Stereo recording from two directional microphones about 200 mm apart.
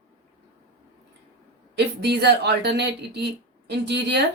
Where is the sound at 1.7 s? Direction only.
55° right (ahead or behind).